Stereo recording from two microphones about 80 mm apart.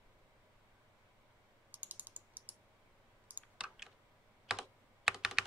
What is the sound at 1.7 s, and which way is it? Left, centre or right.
Typing, right.